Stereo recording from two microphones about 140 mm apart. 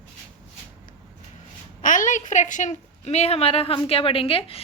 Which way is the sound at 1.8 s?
65° left (ahead or behind).